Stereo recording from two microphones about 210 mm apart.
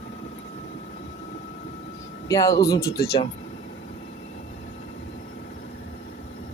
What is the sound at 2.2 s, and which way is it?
Speech, 15° left (ahead or behind).